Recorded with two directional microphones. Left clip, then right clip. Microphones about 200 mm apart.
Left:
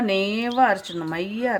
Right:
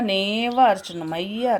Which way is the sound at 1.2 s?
30° left (ahead or behind).